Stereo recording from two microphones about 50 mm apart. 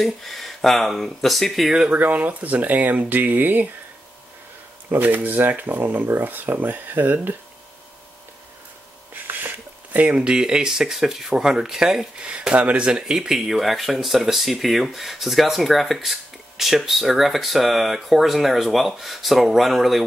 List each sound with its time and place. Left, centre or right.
0.0 s speech: centre
1.9 s speech: right
4.9 s speech: right
9.1 s a sound: right
9.9 s speech: right; by 12.1 s centre
12.2 s speech: right; by 20.0 s centre